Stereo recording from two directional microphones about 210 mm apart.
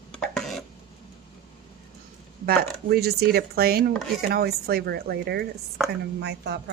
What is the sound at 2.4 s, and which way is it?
Speech, 45° right (ahead or behind).